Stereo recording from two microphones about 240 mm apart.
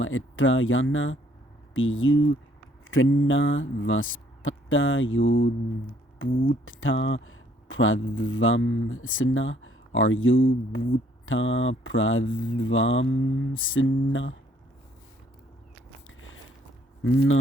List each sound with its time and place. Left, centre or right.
0.0 s speech: left
6.3 s speech: left
6.7 s speech: left
16.0 s a sound: left
17.0 s speech: left